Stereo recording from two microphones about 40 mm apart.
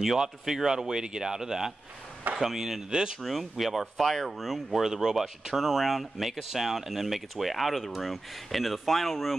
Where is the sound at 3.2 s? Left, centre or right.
Centre.